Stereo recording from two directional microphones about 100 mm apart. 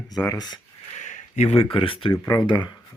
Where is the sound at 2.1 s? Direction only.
35° left (ahead or behind).